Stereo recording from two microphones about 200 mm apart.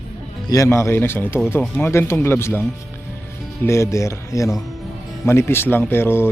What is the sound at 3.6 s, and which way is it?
Speech, 15° left (ahead or behind).